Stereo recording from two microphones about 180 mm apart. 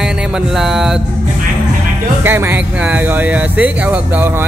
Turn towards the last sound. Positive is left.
turn(degrees=-10)  # may be behind; listen again after turning